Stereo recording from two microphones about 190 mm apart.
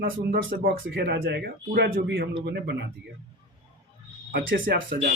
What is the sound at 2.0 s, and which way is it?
Speech, 70° right (ahead or behind).